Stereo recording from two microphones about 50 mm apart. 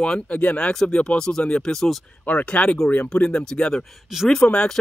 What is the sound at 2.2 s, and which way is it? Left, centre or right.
Speech, left.